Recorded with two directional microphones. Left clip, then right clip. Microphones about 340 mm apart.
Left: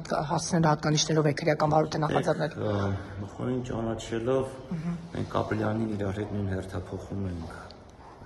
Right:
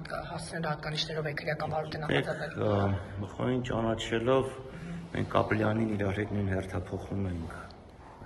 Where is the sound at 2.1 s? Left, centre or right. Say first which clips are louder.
Left 4 dB; centre.